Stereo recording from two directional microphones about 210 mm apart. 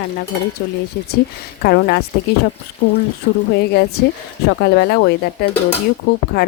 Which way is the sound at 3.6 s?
50° left (ahead or behind).